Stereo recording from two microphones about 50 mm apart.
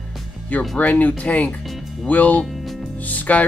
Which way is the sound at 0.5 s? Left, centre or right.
Left.